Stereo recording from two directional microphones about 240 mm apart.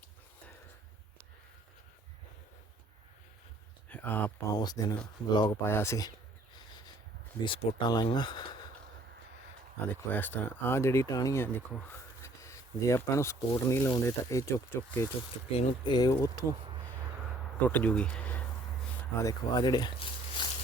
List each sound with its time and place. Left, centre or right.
3.8 s speech: centre
7.4 s speech: centre
9.8 s speech: centre
17.6 s speech: centre